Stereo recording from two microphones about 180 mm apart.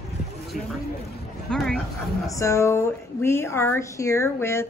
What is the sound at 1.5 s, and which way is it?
Speech, 5° left (ahead or behind).